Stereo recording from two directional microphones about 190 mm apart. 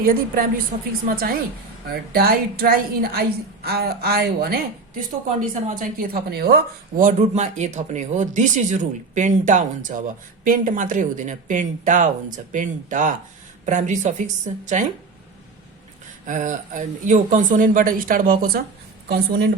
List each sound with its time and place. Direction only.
0.0 s speech: 50° right (ahead or behind)
5.6 s speech: 45° right (ahead or behind)
16.2 s a woman's voice: 40° right (ahead or behind); by 19.4 s 55° right (ahead or behind)